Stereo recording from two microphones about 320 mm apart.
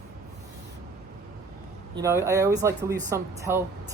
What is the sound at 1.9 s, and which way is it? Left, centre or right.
Speech, centre.